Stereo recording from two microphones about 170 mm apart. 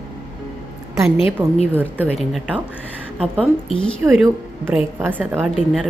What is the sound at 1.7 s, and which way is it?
A woman's voice, 10° right (ahead or behind).